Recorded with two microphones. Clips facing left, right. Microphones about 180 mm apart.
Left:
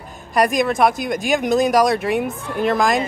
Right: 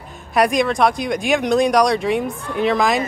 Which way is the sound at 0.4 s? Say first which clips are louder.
Even; centre (ahead or behind).